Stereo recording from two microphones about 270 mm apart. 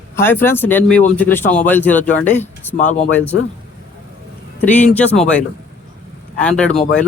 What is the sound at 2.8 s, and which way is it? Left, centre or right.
Speech, left.